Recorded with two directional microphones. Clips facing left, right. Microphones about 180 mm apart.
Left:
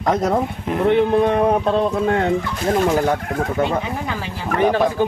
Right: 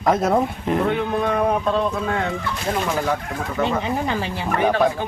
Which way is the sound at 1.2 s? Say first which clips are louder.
Left 4 dB; 30° left (ahead or behind).